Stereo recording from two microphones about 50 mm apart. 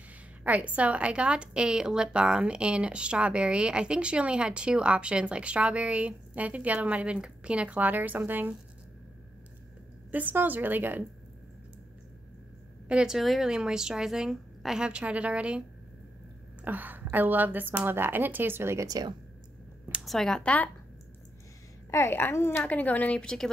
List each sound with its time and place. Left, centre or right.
0.4 s a woman's voice: right
10.3 s speech: right
12.8 s a woman's voice: right
13.1 s a woman's voice: centre; by 15.6 s right
16.6 s a woman's voice: right
20.0 s speech: centre
20.4 s a woman's voice: left
22.3 s a woman's voice: left
22.6 s a woman's voice: left